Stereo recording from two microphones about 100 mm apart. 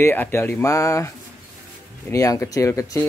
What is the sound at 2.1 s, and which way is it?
Speech, 30° left (ahead or behind).